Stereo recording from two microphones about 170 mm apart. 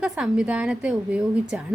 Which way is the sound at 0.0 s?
5° right (ahead or behind).